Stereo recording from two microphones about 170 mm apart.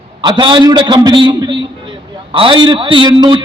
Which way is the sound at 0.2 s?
30° right (ahead or behind).